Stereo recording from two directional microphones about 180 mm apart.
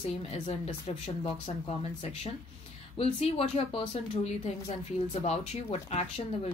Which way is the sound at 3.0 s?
35° left (ahead or behind).